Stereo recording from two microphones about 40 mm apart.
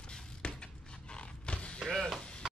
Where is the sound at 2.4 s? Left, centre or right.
Centre.